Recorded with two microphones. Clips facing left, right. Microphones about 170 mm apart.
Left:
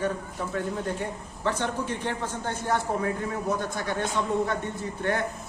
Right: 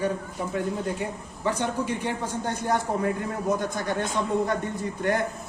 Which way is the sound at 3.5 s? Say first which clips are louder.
Right 2 dB; 45° right (ahead or behind).